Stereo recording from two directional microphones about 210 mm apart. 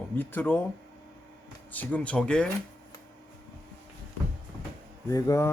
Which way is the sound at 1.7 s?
5° left (ahead or behind).